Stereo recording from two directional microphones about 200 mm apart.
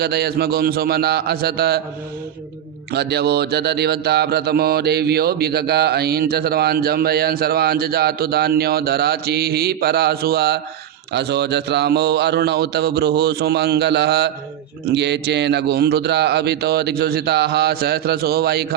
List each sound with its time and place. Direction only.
0.0 s mantra: 55° right (ahead or behind)
2.9 s mantra: 55° right (ahead or behind)
11.1 s a man's voice: 55° right (ahead or behind)
14.8 s mantra: 60° right (ahead or behind)